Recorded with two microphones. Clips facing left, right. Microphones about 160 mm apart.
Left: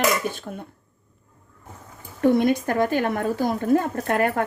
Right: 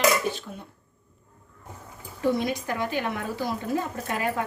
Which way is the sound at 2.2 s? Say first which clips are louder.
Left 7 dB; 55° left (ahead or behind).